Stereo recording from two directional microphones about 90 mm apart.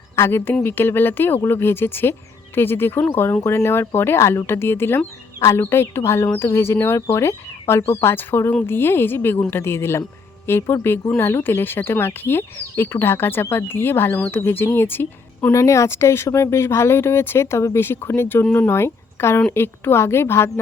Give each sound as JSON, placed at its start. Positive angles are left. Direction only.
{"t": 0.2, "sound": "speech", "side_deg": 25}
{"t": 15.5, "sound": "speech", "side_deg": 35}